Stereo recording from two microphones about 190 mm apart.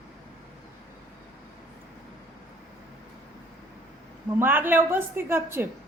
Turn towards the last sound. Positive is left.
turn(degrees=-10)  # may be behind; listen again after turning